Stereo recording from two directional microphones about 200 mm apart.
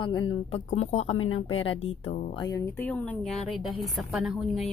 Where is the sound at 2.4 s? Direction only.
15° left (ahead or behind).